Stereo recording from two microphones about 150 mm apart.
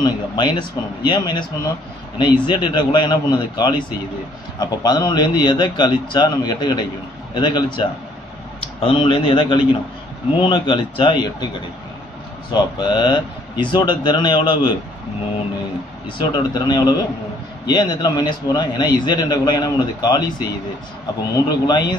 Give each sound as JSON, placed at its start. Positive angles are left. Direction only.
{"t": 0.0, "sound": "a man's voice", "side_deg": 30}
{"t": 16.2, "sound": "a man's voice", "side_deg": 30}
{"t": 21.5, "sound": "a man's voice", "side_deg": 25}